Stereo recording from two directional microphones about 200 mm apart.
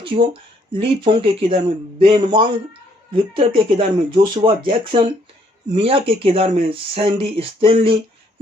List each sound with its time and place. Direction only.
0.0 s speech: 25° right (ahead or behind)